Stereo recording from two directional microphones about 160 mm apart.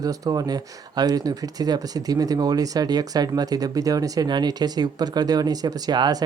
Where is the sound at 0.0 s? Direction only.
25° right (ahead or behind).